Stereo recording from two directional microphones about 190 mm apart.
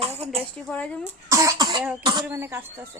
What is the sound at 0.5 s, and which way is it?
Speech, 5° left (ahead or behind).